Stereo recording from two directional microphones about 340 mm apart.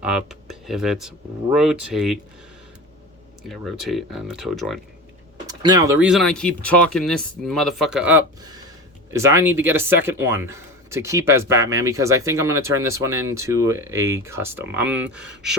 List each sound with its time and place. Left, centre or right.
0.0 s speech: centre
3.5 s speech: centre
5.5 s speech: centre